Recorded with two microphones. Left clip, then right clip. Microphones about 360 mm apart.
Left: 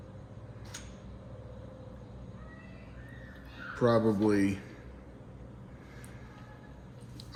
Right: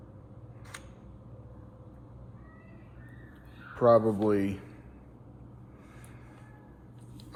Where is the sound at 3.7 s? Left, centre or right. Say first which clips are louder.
Right 5 dB; centre.